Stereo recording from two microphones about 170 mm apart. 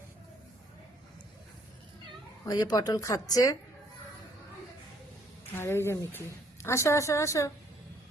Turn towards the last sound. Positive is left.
turn(degrees=15)  # may be behind; listen again after turning